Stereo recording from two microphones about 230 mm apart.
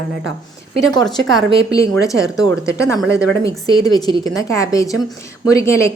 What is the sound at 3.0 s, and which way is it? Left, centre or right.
Speech, centre.